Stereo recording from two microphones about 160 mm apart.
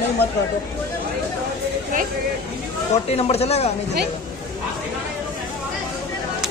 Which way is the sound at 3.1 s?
40° left (ahead or behind).